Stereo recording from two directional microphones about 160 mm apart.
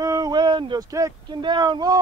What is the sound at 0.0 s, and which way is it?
Speech, 20° right (ahead or behind).